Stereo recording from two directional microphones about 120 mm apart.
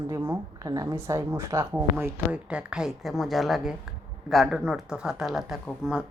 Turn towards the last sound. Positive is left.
turn(degrees=-5)  # may be behind; listen again after turning